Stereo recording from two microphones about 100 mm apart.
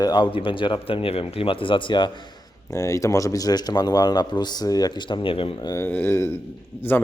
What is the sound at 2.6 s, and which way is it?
Speech, 30° left (ahead or behind).